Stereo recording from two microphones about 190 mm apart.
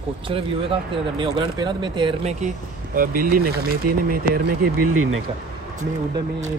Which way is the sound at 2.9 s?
50° right (ahead or behind).